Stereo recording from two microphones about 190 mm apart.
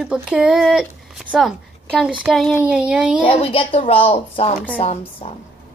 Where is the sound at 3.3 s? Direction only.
30° left (ahead or behind).